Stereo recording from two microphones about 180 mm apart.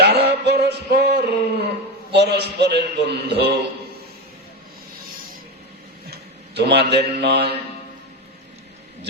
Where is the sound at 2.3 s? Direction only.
65° right (ahead or behind).